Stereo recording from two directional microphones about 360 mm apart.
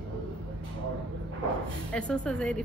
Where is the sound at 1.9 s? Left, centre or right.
Centre.